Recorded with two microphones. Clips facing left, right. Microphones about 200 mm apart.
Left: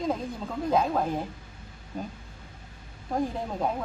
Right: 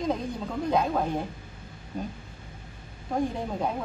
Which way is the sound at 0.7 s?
Centre (ahead or behind).